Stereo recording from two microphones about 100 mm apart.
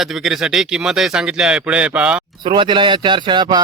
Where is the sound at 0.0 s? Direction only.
5° right (ahead or behind).